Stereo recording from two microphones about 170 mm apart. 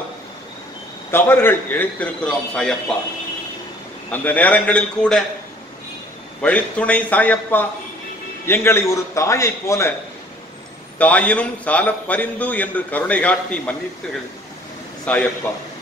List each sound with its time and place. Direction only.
1.1 s a man's voice: 15° left (ahead or behind)
4.1 s a man's voice: 10° left (ahead or behind)
6.4 s a man's voice: 10° left (ahead or behind)
11.0 s a man's voice: 10° left (ahead or behind)
15.1 s a man's voice: 5° left (ahead or behind)